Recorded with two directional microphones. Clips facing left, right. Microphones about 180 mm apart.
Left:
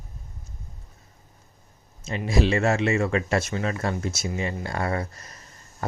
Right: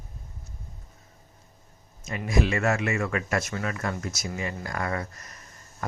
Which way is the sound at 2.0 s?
30° left (ahead or behind).